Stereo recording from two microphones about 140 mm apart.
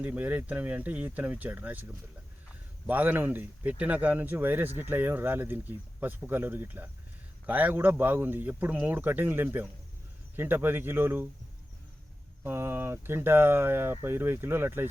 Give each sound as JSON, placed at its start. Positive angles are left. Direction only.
{"t": 0.0, "sound": "speech", "side_deg": -10}
{"t": 12.4, "sound": "speech", "side_deg": -15}